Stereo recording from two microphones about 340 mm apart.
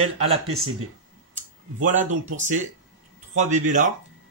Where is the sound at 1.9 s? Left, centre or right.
Right.